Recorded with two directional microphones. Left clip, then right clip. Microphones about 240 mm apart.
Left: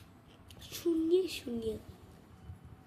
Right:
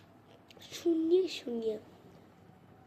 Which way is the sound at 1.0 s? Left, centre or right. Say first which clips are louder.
Right 1 dB; left.